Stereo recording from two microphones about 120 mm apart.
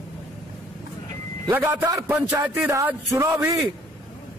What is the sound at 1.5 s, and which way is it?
A man's voice, 15° right (ahead or behind).